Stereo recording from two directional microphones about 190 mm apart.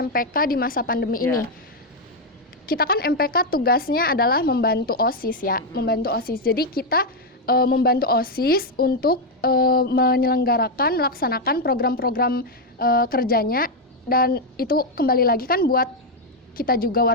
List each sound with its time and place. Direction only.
0.0 s a woman's voice: 50° left (ahead or behind)
2.6 s a woman's voice: 50° left (ahead or behind)